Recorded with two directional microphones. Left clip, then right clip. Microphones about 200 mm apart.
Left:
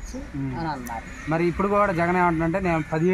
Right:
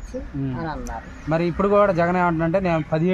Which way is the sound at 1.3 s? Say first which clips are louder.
Right 3 dB; 50° right (ahead or behind).